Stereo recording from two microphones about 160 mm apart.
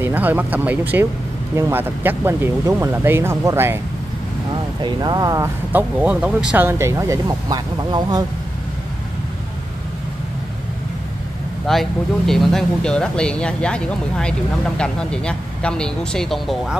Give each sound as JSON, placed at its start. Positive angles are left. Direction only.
{"t": 0.0, "sound": "speech", "side_deg": -10}
{"t": 4.5, "sound": "speech", "side_deg": -25}
{"t": 11.6, "sound": "speech", "side_deg": 0}